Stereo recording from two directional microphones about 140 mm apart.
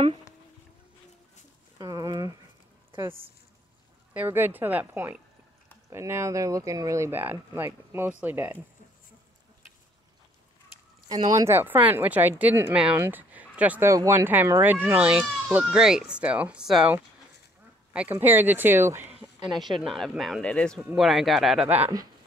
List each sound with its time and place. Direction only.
1.8 s a sound: 25° right (ahead or behind)
4.1 s speech: 15° right (ahead or behind)
11.1 s speech: 25° right (ahead or behind)
19.6 s speech: centre (ahead or behind)